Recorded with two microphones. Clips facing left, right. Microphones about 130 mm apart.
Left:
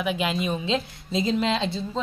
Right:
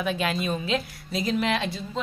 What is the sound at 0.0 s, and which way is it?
A woman's voice, 15° left (ahead or behind).